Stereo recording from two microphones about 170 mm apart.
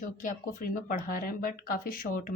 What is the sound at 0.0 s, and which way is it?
A woman's voice, 50° left (ahead or behind).